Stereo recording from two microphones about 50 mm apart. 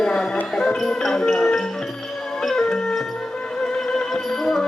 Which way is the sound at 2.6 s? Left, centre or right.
Centre.